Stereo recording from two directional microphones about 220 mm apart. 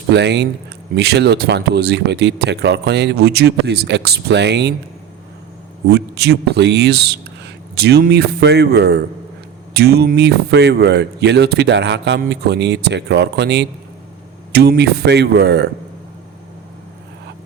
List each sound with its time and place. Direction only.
0.1 s speech: 50° right (ahead or behind)
5.9 s speech: 50° right (ahead or behind)